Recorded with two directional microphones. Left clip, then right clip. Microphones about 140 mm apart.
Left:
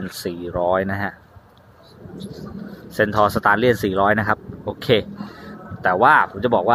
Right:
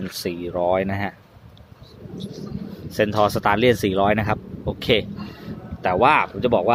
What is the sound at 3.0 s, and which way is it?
Speech, 20° right (ahead or behind).